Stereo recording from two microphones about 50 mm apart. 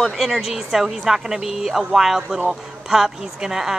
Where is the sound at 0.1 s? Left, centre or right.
Centre.